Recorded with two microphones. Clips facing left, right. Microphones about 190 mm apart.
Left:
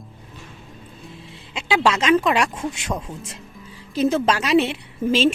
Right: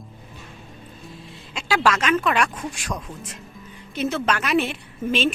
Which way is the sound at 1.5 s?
20° left (ahead or behind).